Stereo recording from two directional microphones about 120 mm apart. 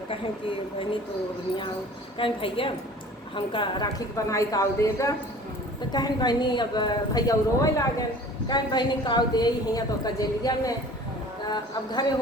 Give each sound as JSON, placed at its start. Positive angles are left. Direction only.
{"t": 2.1, "sound": "a woman's voice", "side_deg": 45}
{"t": 4.1, "sound": "a woman's voice", "side_deg": 25}